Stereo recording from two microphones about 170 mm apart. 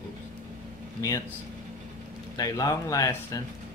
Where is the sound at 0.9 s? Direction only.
20° left (ahead or behind).